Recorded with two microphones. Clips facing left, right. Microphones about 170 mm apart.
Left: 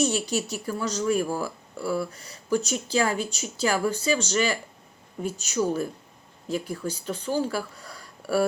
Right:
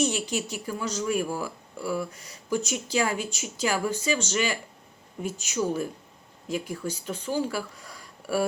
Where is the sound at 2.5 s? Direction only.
35° left (ahead or behind).